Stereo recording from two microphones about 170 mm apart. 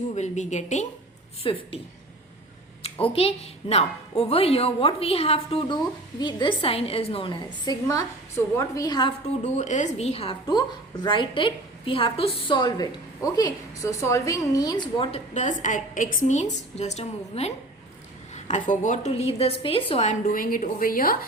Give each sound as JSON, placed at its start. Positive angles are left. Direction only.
{"t": 0.1, "sound": "a woman's voice", "side_deg": 45}
{"t": 1.5, "sound": "a woman's voice", "side_deg": 30}
{"t": 2.8, "sound": "a woman's voice", "side_deg": 35}
{"t": 9.4, "sound": "a woman's voice", "side_deg": 45}
{"t": 15.3, "sound": "a woman's voice", "side_deg": 45}